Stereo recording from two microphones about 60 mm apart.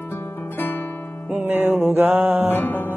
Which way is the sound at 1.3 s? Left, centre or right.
Right.